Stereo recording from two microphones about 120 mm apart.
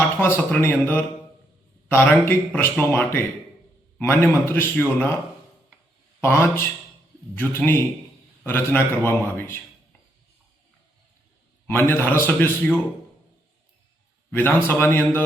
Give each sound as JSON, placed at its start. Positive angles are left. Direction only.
{"t": 0.2, "sound": "a man's voice", "side_deg": 20}
{"t": 6.2, "sound": "a man's voice", "side_deg": 20}
{"t": 11.7, "sound": "a man's voice", "side_deg": 20}
{"t": 14.3, "sound": "a man's voice", "side_deg": 15}